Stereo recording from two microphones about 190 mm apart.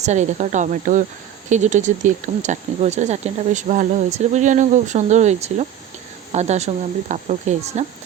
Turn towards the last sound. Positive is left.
turn(degrees=-35)  # may be behind; listen again after turning